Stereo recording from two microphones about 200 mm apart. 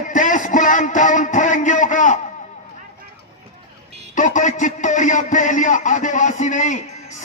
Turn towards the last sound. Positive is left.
turn(degrees=35)  # may be behind; listen again after turning